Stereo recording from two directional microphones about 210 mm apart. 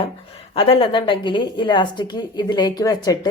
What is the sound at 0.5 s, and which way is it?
A woman's voice, 25° left (ahead or behind).